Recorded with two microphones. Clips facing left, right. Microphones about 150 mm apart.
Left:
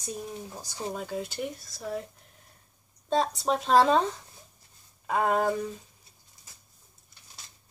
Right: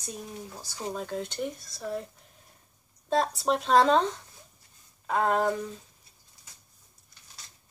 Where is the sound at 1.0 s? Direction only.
5° left (ahead or behind).